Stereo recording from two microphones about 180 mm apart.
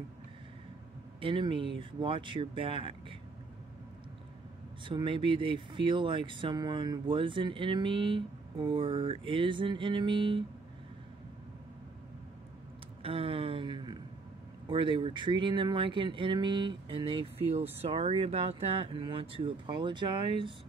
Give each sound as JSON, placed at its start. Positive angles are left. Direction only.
{"t": 1.2, "sound": "speech", "side_deg": -25}
{"t": 4.8, "sound": "speech", "side_deg": -30}
{"t": 13.0, "sound": "a sound", "side_deg": -30}
{"t": 14.7, "sound": "speech", "side_deg": -30}